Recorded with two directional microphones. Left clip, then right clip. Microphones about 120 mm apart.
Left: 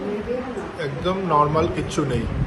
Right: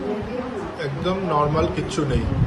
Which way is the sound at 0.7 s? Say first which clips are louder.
Left 1 dB; 15° right (ahead or behind).